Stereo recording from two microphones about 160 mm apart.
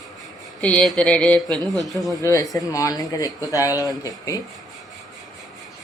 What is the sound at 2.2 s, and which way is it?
Speech, 20° left (ahead or behind).